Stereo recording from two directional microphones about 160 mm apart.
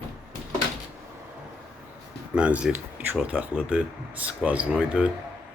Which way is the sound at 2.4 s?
5° right (ahead or behind).